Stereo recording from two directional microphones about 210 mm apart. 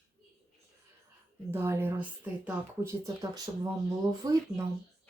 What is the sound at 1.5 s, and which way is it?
Speech, 10° right (ahead or behind).